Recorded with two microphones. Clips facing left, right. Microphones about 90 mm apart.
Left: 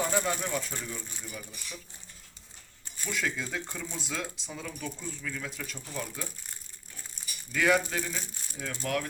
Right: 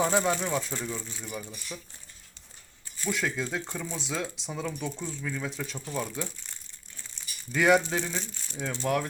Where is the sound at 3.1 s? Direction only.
15° right (ahead or behind).